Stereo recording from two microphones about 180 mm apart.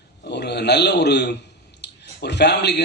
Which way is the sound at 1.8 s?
70° left (ahead or behind).